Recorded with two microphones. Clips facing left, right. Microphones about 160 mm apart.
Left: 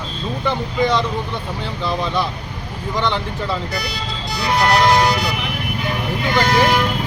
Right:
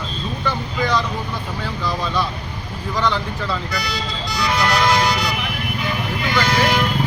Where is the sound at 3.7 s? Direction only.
55° left (ahead or behind).